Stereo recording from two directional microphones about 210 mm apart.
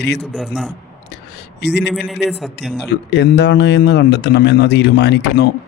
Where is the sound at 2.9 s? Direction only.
55° left (ahead or behind).